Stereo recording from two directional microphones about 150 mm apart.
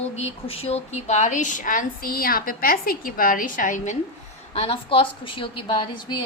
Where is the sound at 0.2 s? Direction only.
40° left (ahead or behind); by 3.9 s 60° left (ahead or behind).